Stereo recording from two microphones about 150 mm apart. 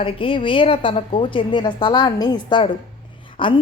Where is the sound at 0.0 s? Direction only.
35° left (ahead or behind).